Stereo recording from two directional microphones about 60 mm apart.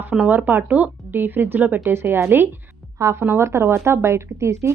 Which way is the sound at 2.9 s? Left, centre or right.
Right.